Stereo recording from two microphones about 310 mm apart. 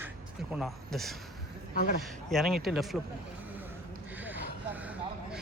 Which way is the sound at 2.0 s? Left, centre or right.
Centre.